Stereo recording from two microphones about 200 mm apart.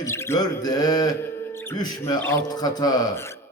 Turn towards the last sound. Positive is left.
turn(degrees=20)  # may be behind; listen again after turning